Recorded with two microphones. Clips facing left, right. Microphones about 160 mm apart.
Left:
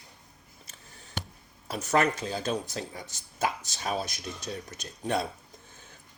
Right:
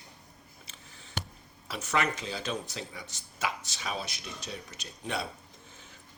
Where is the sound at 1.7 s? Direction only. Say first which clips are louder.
Left 5 dB; 40° left (ahead or behind).